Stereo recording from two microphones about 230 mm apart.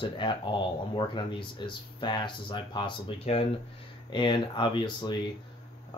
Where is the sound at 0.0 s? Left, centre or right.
Left.